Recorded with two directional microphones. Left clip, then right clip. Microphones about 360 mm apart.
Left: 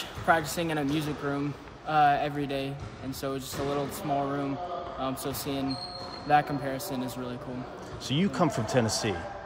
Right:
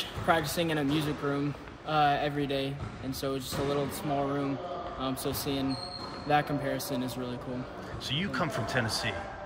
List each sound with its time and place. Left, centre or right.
0.3 s speech: centre
8.1 s speech: centre